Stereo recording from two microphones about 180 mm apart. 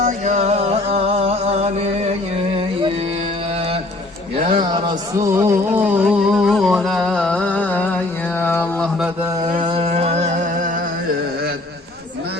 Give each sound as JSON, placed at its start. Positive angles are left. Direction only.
{"t": 0.0, "sound": "music", "side_deg": -40}
{"t": 5.3, "sound": "a sound", "side_deg": -15}
{"t": 9.6, "sound": "music", "side_deg": -35}